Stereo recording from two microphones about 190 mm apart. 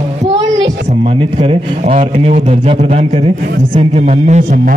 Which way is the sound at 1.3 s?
30° right (ahead or behind).